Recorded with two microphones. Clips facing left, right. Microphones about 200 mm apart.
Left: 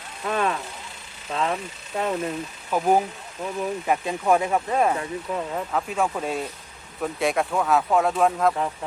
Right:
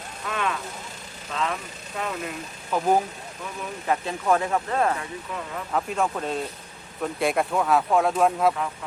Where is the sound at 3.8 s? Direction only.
15° left (ahead or behind).